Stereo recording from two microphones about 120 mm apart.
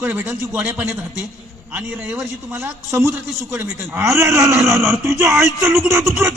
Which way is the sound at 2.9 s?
25° right (ahead or behind).